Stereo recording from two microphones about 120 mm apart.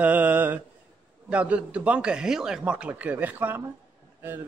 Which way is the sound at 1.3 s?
10° right (ahead or behind).